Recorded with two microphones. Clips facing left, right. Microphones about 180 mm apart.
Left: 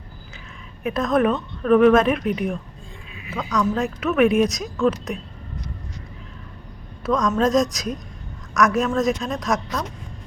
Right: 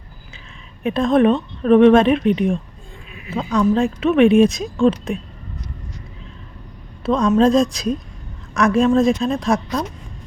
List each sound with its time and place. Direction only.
0.9 s speech: 25° right (ahead or behind)
7.0 s speech: 30° right (ahead or behind)